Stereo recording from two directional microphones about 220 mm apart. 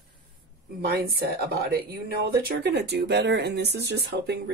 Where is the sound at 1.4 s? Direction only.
45° right (ahead or behind).